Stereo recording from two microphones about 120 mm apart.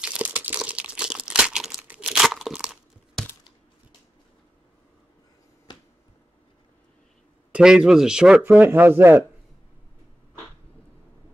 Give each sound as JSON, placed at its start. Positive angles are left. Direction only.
{"t": 0.0, "sound": "crumpling", "side_deg": -10}
{"t": 2.2, "sound": "crunch", "side_deg": -5}
{"t": 7.5, "sound": "speech", "side_deg": -5}